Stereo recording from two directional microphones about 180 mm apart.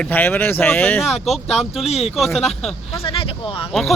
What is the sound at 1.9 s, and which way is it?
Speech, 35° left (ahead or behind).